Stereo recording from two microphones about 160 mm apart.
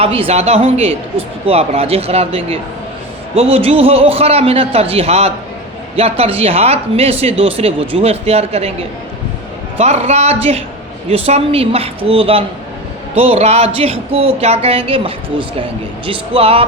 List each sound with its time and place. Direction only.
0.0 s speech: 35° right (ahead or behind)
9.7 s speech: 40° right (ahead or behind)